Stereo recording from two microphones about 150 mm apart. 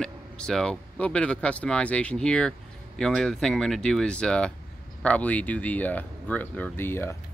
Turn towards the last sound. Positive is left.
turn(degrees=15)  # may be behind; listen again after turning